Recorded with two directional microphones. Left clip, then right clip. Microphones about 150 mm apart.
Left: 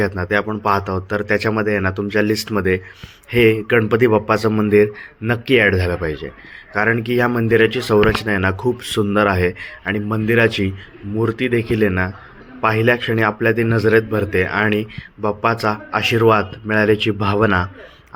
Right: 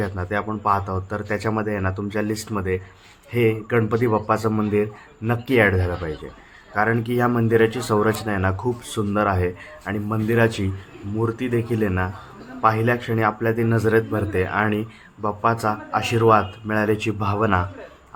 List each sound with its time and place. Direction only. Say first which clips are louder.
0.0 s speech: left 7 dB; 15° left (ahead or behind)